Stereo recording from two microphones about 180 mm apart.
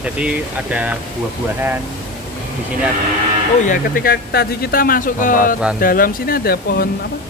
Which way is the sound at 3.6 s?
50° left (ahead or behind).